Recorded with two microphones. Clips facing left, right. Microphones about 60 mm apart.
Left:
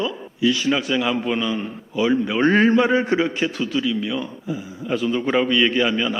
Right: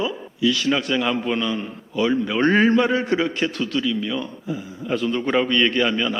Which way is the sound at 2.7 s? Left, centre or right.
Centre.